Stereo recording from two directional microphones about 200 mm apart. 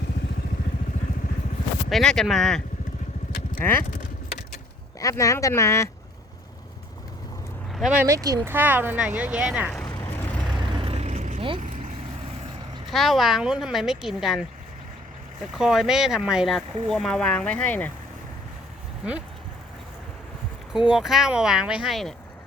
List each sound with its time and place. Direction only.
1.9 s speech: 5° left (ahead or behind)
3.6 s speech: 10° left (ahead or behind)
4.9 s speech: 15° left (ahead or behind)
7.7 s speech: 5° right (ahead or behind)
8.0 s speech: 15° right (ahead or behind)
10.8 s vehicle: 30° right (ahead or behind)
12.9 s speech: centre (ahead or behind)
15.5 s speech: centre (ahead or behind)
20.7 s speech: 5° right (ahead or behind)